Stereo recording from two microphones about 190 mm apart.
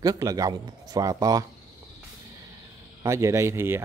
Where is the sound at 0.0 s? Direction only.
20° right (ahead or behind).